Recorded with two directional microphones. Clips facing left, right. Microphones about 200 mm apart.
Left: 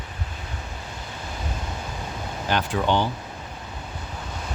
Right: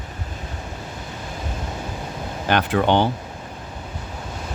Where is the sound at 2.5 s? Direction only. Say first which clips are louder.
Right 5 dB; 65° right (ahead or behind).